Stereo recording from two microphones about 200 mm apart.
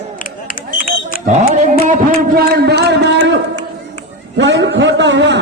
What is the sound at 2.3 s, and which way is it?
A man's voice, 55° right (ahead or behind).